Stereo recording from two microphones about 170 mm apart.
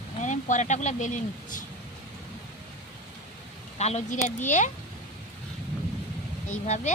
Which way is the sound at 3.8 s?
45° left (ahead or behind).